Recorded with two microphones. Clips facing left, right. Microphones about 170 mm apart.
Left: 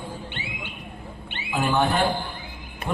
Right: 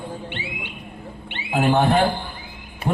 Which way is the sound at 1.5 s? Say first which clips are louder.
Right 5 dB; 55° right (ahead or behind).